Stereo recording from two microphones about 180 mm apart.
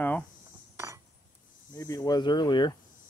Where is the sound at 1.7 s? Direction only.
20° left (ahead or behind).